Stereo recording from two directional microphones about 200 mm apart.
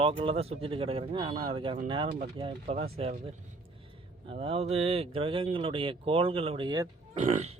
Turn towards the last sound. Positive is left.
turn(degrees=-40)  # may be behind; listen again after turning